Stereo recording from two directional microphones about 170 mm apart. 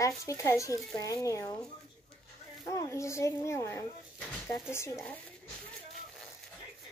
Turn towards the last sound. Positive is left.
turn(degrees=15)  # may be behind; listen again after turning